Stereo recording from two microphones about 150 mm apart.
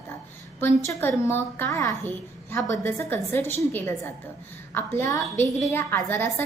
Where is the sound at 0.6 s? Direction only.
15° left (ahead or behind).